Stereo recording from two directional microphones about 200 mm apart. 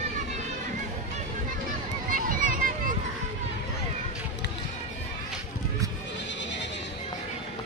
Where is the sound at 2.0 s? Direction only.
45° right (ahead or behind).